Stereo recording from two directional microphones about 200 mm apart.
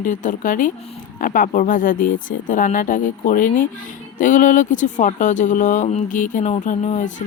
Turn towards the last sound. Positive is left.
turn(degrees=40)  # may be behind; listen again after turning